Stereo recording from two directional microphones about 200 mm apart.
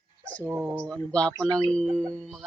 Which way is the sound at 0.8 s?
5° left (ahead or behind).